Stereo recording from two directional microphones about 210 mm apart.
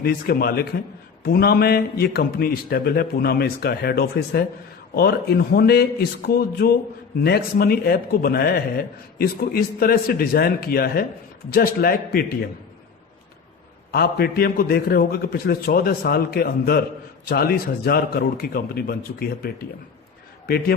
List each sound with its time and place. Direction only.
0.0 s a man's voice: 45° left (ahead or behind)
13.9 s a man's voice: 45° left (ahead or behind)